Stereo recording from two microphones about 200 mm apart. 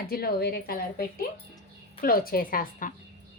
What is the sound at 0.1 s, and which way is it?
A woman's voice, 50° left (ahead or behind).